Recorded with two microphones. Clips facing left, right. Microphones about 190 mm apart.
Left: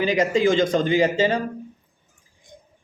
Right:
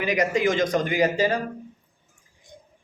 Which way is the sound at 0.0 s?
30° left (ahead or behind).